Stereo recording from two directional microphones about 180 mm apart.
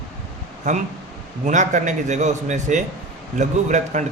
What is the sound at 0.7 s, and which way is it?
A man's voice, 45° right (ahead or behind).